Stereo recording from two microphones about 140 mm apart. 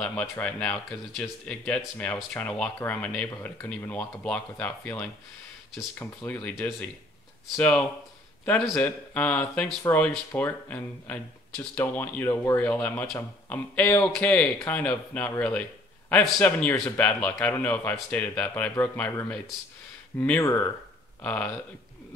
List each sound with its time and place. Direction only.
0.0 s speech: 10° left (ahead or behind)
7.5 s speech: 10° left (ahead or behind)